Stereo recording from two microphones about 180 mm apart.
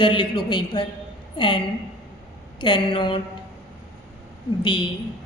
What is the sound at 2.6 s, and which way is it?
Speech, 25° left (ahead or behind).